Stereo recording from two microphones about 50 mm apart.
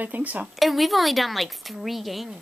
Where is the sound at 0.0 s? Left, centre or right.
Right.